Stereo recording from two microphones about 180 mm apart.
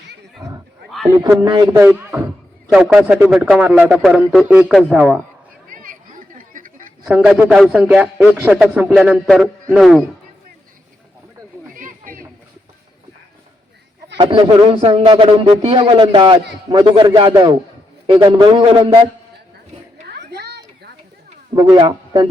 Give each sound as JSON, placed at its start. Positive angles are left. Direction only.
{"t": 0.3, "sound": "roaring cats", "side_deg": -20}
{"t": 1.1, "sound": "a man's voice", "side_deg": -20}
{"t": 5.7, "sound": "chatter", "side_deg": -50}
{"t": 7.0, "sound": "a man's voice", "side_deg": 0}
{"t": 11.7, "sound": "chatter", "side_deg": -50}
{"t": 14.2, "sound": "a man's voice", "side_deg": -25}
{"t": 20.1, "sound": "children playing", "side_deg": -65}
{"t": 21.5, "sound": "a man's voice", "side_deg": -25}